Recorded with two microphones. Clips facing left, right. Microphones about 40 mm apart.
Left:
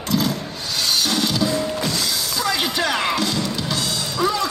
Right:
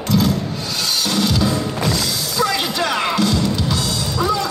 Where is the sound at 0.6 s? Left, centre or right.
Left.